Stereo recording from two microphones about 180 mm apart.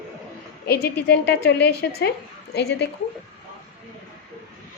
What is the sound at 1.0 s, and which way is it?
A woman's voice, 65° left (ahead or behind).